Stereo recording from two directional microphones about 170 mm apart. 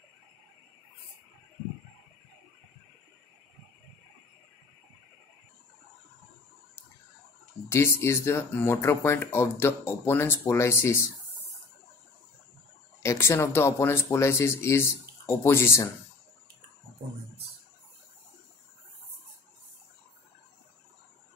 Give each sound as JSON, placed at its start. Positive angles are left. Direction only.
{"t": 7.7, "sound": "speech", "side_deg": 15}
{"t": 13.0, "sound": "speech", "side_deg": 15}